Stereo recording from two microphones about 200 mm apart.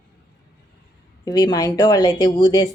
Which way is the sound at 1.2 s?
20° left (ahead or behind).